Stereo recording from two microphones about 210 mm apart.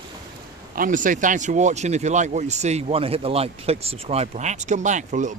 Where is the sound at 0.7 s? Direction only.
40° right (ahead or behind).